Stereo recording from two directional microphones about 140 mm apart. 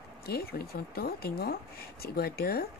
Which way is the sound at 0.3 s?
90° left.